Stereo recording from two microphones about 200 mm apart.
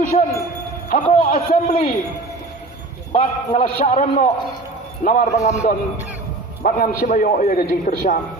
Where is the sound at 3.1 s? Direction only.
30° left (ahead or behind).